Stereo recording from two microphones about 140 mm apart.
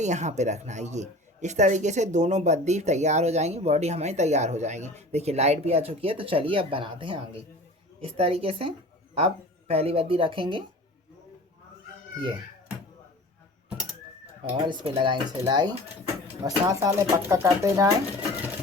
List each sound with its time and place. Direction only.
0.0 s speech: 55° right (ahead or behind); by 10.6 s 35° right (ahead or behind)
14.5 s speech: 35° right (ahead or behind); by 17.9 s 20° right (ahead or behind)